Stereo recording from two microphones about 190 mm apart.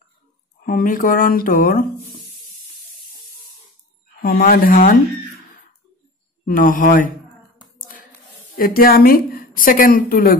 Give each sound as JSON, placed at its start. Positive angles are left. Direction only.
{"t": 0.7, "sound": "a woman's voice", "side_deg": 45}
{"t": 4.2, "sound": "a woman's voice", "side_deg": 50}
{"t": 6.4, "sound": "a woman's voice", "side_deg": 45}
{"t": 8.5, "sound": "a woman's voice", "side_deg": 50}